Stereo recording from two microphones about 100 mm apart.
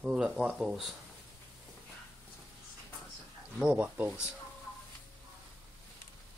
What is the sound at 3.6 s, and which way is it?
Speech, 10° right (ahead or behind).